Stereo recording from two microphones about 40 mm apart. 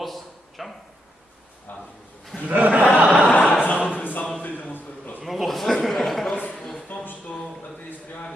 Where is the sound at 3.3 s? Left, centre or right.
Left.